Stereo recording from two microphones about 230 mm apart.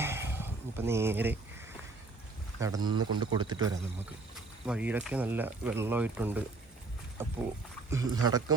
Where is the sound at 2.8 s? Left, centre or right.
Right.